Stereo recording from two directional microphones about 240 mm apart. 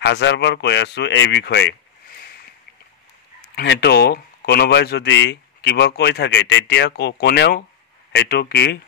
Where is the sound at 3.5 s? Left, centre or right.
Left.